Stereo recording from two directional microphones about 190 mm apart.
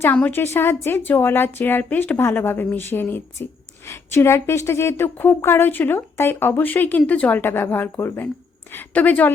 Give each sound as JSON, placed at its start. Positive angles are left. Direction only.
{"t": 0.0, "sound": "a woman's voice", "side_deg": 10}